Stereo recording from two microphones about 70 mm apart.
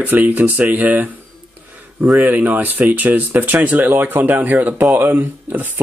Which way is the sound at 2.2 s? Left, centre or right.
Right.